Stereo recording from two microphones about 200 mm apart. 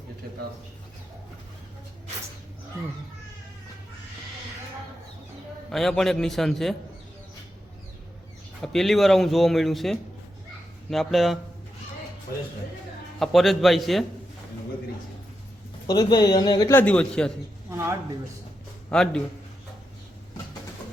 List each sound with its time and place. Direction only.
5.7 s speech: centre (ahead or behind)
8.6 s speech: centre (ahead or behind)
13.1 s speech: centre (ahead or behind)
15.9 s a man's voice: 20° left (ahead or behind); by 17.3 s 5° left (ahead or behind)
17.7 s speech: 15° right (ahead or behind)
18.9 s speech: 5° left (ahead or behind)